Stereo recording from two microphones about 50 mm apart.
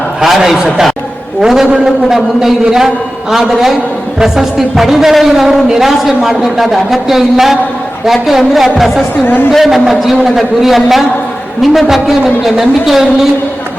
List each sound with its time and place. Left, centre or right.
0.2 s a man's voice: centre
9.2 s a woman's voice: left
9.5 s speech: centre